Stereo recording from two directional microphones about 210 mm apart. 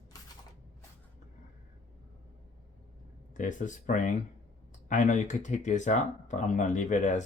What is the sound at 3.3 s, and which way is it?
Speech, 35° left (ahead or behind).